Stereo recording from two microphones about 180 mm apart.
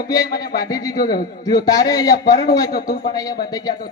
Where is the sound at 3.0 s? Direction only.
20° left (ahead or behind).